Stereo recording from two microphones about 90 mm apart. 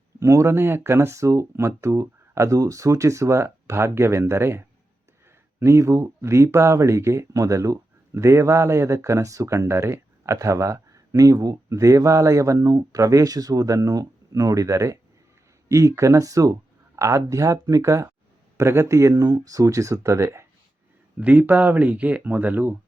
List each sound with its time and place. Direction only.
0.2 s speech: 35° right (ahead or behind)
21.2 s speech: 15° right (ahead or behind)